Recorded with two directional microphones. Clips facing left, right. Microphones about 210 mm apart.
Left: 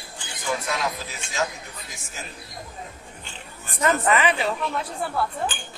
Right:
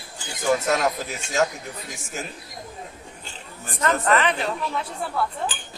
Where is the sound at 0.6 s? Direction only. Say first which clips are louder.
Right 6 dB; 45° right (ahead or behind).